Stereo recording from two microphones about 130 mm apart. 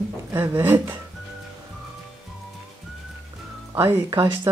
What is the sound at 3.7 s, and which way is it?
Speech, 20° right (ahead or behind).